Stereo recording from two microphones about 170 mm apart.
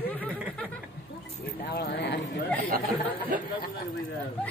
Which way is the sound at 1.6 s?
65° left (ahead or behind).